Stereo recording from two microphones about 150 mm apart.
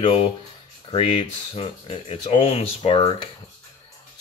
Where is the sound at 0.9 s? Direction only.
40° left (ahead or behind).